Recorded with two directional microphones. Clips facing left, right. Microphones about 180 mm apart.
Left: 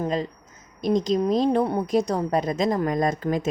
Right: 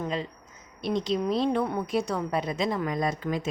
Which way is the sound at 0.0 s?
40° left (ahead or behind).